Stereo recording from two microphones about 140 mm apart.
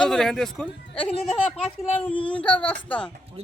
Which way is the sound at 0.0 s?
5° left (ahead or behind).